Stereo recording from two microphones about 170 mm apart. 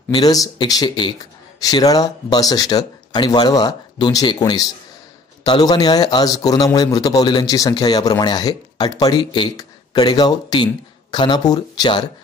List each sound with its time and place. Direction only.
0.1 s a man's voice: 20° left (ahead or behind)